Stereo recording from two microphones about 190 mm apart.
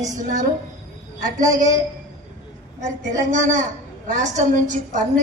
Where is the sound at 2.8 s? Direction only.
40° right (ahead or behind).